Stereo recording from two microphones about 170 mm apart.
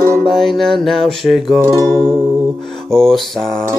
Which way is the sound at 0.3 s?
Centre (ahead or behind).